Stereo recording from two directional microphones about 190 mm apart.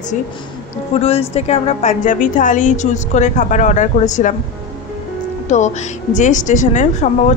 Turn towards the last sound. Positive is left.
turn(degrees=40)  # may be behind; listen again after turning